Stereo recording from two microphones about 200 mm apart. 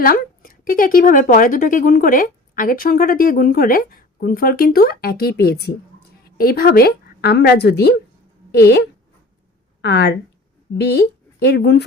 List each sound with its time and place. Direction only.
0.0 s a woman's voice: 45° left (ahead or behind)